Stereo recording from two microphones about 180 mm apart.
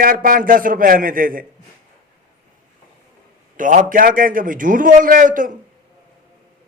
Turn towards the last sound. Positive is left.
turn(degrees=-50)  # may be behind; listen again after turning